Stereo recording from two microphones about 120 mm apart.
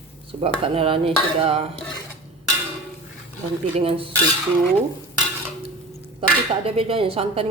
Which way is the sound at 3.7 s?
50° right (ahead or behind).